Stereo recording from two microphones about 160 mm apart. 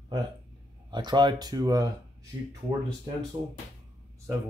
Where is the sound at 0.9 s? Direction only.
30° right (ahead or behind).